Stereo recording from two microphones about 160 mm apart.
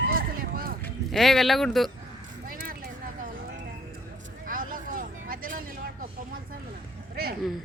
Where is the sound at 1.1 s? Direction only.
Centre (ahead or behind).